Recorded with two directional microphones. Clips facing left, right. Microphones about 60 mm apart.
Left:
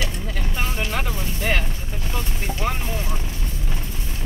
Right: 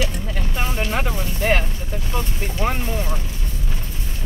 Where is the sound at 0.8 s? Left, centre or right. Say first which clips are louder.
Right 3 dB; right.